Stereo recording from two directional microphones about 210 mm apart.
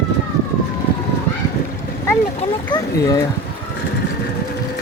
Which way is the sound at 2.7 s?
15° left (ahead or behind).